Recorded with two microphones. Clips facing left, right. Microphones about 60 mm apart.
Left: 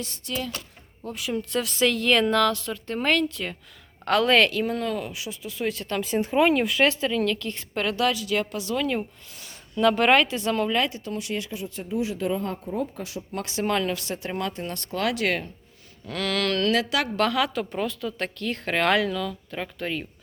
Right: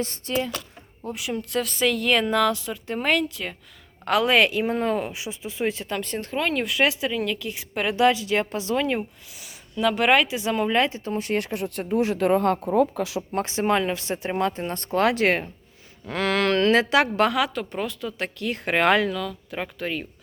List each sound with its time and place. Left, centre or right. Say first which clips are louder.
0.0 s speech: right 5 dB; right
1.0 s speech: even; centre
6.0 s speech: left 10 dB; centre
7.9 s speech: right 5 dB; right
9.0 s speech: even; centre
10.8 s speech: right 3 dB; right
11.3 s speech: right 5 dB; right
13.3 s speech: right 3 dB; right
17.3 s speech: even; centre